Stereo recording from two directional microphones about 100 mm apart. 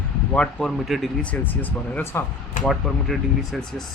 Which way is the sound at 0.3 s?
Centre (ahead or behind).